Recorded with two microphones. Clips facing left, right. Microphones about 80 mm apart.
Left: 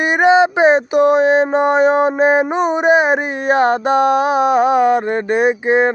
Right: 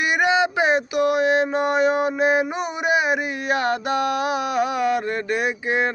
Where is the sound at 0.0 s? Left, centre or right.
Left.